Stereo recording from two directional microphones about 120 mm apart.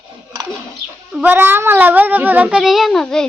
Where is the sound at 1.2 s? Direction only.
15° right (ahead or behind).